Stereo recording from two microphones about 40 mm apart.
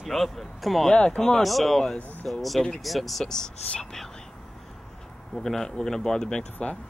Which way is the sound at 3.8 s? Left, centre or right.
Centre.